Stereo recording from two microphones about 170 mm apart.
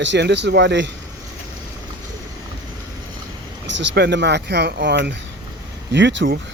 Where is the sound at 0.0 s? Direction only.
90° right.